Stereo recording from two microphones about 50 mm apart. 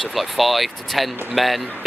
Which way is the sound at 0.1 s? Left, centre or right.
Centre.